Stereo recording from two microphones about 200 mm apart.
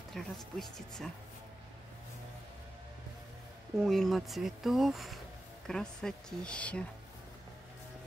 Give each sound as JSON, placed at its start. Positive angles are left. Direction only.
{"t": 0.1, "sound": "speech", "side_deg": 0}
{"t": 3.8, "sound": "speech", "side_deg": 0}